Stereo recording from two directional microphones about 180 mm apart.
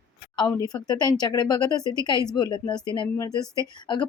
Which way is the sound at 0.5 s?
20° left (ahead or behind).